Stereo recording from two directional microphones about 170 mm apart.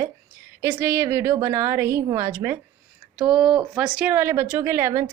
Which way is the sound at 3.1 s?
5° right (ahead or behind).